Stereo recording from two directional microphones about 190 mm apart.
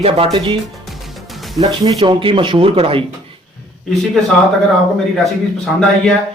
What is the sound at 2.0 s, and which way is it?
Speech, 25° right (ahead or behind).